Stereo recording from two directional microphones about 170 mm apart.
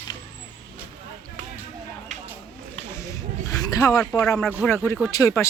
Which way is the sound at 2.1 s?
45° right (ahead or behind).